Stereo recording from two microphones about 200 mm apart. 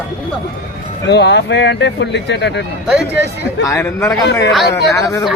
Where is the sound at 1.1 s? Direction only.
55° left (ahead or behind).